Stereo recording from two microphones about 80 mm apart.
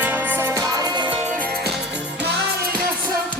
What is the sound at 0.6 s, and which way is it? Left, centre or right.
Music, right.